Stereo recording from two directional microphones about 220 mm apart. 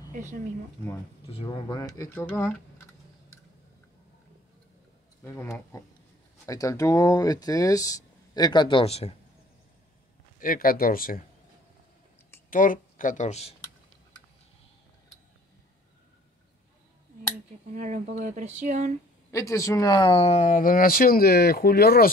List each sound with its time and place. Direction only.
0.1 s speech: 35° right (ahead or behind)
1.3 s speech: 20° left (ahead or behind)
5.2 s speech: 10° left (ahead or behind); by 9.1 s 30° left (ahead or behind)
10.4 s speech: 40° left (ahead or behind)
12.4 s speech: 40° left (ahead or behind)
17.7 s speech: 35° right (ahead or behind)
19.3 s speech: 15° left (ahead or behind); by 22.1 s 45° left (ahead or behind)